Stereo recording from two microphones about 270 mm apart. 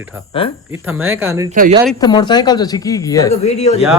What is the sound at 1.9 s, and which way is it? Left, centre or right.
Speech, centre.